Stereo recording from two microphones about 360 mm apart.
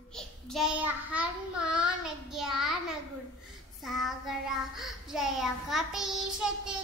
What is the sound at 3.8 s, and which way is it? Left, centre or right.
Child singing, centre.